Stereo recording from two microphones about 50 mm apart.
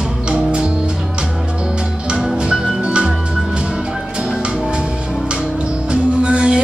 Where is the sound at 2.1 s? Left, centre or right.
Centre.